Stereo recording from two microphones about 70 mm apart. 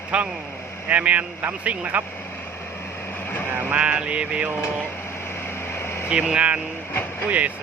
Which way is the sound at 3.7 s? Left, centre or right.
Centre.